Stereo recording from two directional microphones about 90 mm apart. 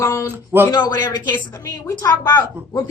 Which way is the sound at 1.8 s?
40° left (ahead or behind).